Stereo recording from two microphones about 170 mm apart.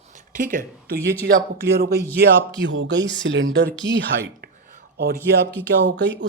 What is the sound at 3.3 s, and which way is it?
Speech, 90° right.